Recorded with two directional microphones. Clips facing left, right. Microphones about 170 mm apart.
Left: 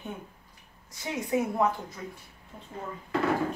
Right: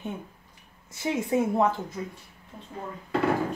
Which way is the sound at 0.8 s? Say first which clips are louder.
Right 6 dB; 25° right (ahead or behind).